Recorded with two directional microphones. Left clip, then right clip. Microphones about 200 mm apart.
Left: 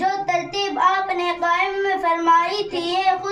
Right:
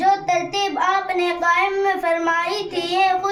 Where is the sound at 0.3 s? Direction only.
10° right (ahead or behind).